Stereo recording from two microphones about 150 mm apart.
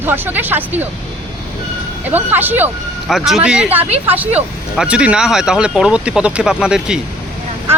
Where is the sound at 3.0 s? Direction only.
Centre (ahead or behind).